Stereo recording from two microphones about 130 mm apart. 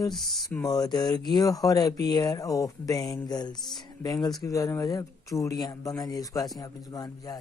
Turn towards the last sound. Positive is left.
turn(degrees=30)  # may be behind; listen again after turning